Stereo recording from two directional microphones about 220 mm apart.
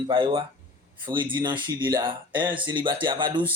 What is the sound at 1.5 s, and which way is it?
A man's voice, 20° right (ahead or behind).